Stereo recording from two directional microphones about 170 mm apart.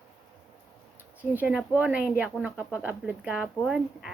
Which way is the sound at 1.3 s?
5° right (ahead or behind).